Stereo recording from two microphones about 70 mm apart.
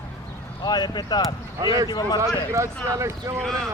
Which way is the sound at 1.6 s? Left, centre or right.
Right.